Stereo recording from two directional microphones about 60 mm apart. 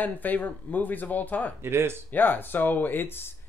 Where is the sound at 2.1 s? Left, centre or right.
Left.